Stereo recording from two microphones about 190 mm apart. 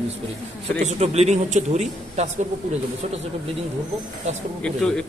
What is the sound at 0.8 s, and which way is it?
Speech, 35° right (ahead or behind).